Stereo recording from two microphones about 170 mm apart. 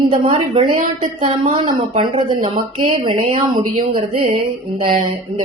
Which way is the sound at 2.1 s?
50° right (ahead or behind).